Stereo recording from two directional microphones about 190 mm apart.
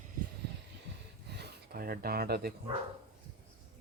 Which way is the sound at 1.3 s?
60° right (ahead or behind).